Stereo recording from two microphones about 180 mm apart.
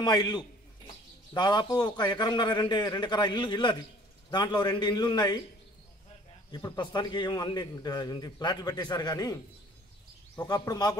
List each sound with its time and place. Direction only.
0.0 s a man's voice: 25° left (ahead or behind)
6.5 s a man's voice: 20° left (ahead or behind)